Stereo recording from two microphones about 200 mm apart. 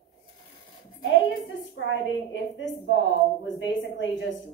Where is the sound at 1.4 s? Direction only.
65° left (ahead or behind).